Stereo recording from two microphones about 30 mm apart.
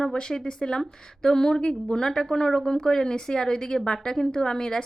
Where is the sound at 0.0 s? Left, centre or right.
Left.